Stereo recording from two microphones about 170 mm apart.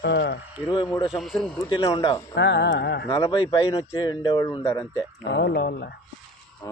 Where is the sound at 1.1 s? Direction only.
Centre (ahead or behind).